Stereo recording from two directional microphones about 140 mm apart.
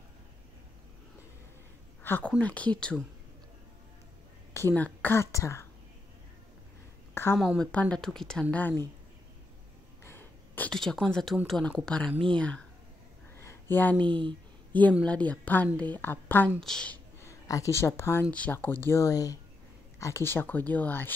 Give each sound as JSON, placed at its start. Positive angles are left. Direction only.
{"t": 2.0, "sound": "a woman's voice", "side_deg": 15}
{"t": 4.6, "sound": "speech", "side_deg": 15}
{"t": 7.2, "sound": "a woman's voice", "side_deg": 15}
{"t": 10.0, "sound": "a sound", "side_deg": 15}
{"t": 11.4, "sound": "a woman's voice", "side_deg": 0}
{"t": 13.4, "sound": "a sound", "side_deg": 15}
{"t": 13.9, "sound": "speech", "side_deg": -35}
{"t": 14.7, "sound": "a woman's voice", "side_deg": 10}
{"t": 17.3, "sound": "a woman's voice", "side_deg": 20}